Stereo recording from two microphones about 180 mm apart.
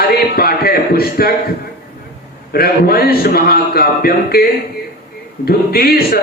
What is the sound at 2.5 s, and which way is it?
A man's voice, 60° left (ahead or behind).